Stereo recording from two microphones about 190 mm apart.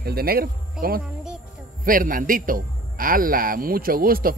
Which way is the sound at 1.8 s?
45° right (ahead or behind).